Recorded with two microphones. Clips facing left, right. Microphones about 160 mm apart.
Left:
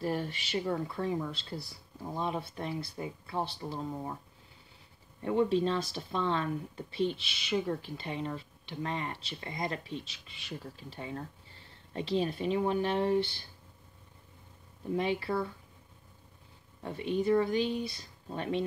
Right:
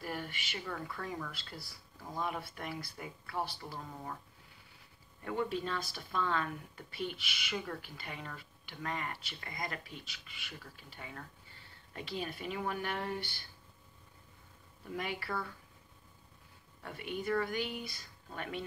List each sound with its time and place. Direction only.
0.0 s speech: 30° left (ahead or behind)
5.2 s speech: 25° left (ahead or behind)
14.9 s speech: 25° left (ahead or behind)
16.8 s speech: 25° left (ahead or behind)